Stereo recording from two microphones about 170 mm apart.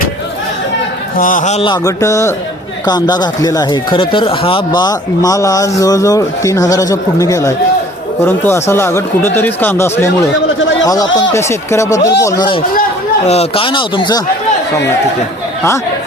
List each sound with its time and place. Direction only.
1.1 s a man's voice: 50° left (ahead or behind)
1.6 s speech: 20° left (ahead or behind)
13.2 s speech: 40° left (ahead or behind)